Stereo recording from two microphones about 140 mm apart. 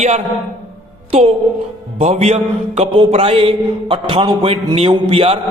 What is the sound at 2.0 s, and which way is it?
A man's voice, 50° right (ahead or behind).